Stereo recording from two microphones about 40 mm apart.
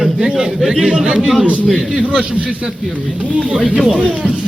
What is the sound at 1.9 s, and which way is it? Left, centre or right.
Speech, right.